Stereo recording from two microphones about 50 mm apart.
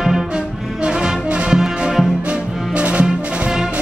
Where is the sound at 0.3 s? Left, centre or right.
Centre.